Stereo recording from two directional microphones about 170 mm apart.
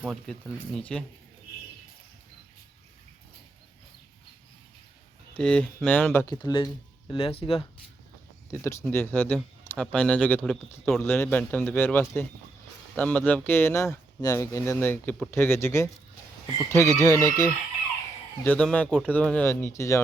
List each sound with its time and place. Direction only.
0.0 s speech: centre (ahead or behind)
5.3 s speech: 5° left (ahead or behind)
6.2 s speech: 25° left (ahead or behind)
8.4 s speech: 15° left (ahead or behind)
18.4 s speech: 10° left (ahead or behind)